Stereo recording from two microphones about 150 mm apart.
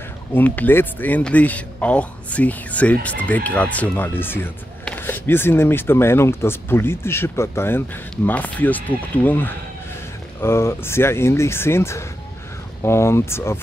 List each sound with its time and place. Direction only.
0.3 s speech: 10° left (ahead or behind)